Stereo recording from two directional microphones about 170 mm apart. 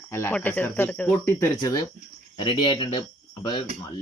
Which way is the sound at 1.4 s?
20° left (ahead or behind).